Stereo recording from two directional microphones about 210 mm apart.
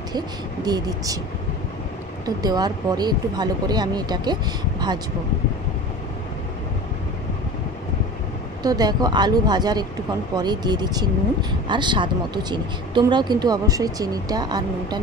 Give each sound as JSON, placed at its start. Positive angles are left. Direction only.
{"t": 0.7, "sound": "speech", "side_deg": -20}
{"t": 2.2, "sound": "speech", "side_deg": -20}
{"t": 8.6, "sound": "speech", "side_deg": -20}